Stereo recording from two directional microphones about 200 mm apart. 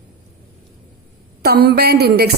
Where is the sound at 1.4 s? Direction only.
50° right (ahead or behind).